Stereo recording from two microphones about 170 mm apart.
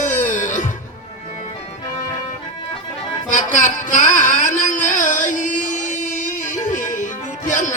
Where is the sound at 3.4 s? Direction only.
50° left (ahead or behind).